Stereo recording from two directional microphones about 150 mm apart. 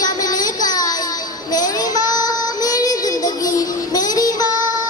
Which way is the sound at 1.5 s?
25° left (ahead or behind).